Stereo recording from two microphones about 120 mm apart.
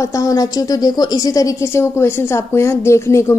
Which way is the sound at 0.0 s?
25° left (ahead or behind).